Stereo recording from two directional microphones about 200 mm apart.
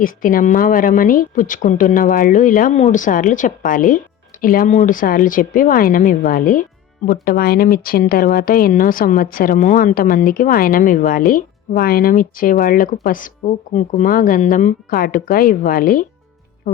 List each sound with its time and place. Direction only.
0.0 s speech: 45° left (ahead or behind)